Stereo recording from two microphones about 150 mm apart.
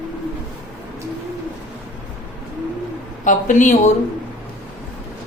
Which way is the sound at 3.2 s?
55° left (ahead or behind).